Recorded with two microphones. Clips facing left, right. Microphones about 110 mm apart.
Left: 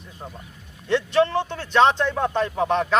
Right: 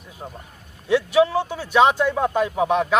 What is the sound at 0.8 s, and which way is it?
Speech, 10° right (ahead or behind).